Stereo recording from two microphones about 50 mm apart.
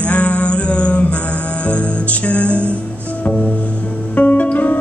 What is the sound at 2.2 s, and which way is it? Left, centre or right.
Music, left.